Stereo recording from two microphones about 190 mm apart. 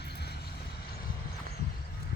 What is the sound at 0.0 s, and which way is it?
Vehicle, 60° left (ahead or behind).